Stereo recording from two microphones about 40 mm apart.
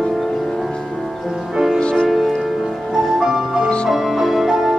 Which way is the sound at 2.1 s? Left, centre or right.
Centre.